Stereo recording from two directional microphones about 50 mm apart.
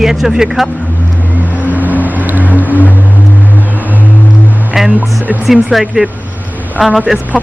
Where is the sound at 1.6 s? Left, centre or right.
Right.